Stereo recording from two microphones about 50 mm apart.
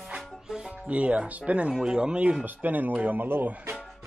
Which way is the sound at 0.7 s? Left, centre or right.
Right.